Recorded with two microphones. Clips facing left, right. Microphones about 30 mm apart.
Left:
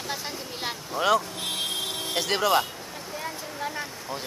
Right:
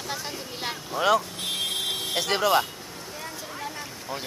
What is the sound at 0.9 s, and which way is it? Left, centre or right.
Speech, centre.